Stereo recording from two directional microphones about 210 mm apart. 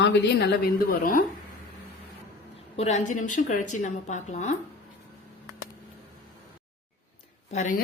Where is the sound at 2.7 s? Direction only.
35° left (ahead or behind).